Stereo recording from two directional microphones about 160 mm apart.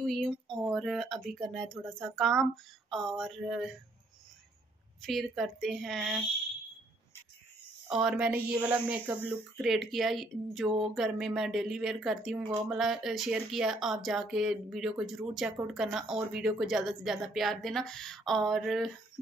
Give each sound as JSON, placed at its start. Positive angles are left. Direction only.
{"t": 0.0, "sound": "speech", "side_deg": 0}
{"t": 5.0, "sound": "speech", "side_deg": 0}
{"t": 7.9, "sound": "speech", "side_deg": -5}